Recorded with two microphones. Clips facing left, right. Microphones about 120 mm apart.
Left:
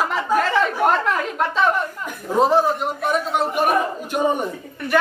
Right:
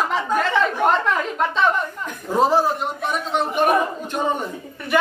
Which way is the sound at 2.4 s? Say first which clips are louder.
Left 1 dB; centre (ahead or behind).